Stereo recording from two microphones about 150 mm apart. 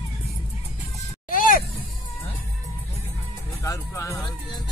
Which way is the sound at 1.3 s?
65° left (ahead or behind).